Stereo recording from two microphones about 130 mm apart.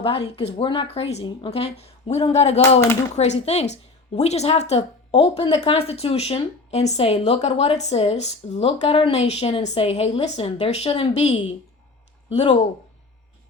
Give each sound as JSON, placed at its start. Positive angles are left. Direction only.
{"t": 0.0, "sound": "a woman's voice", "side_deg": 50}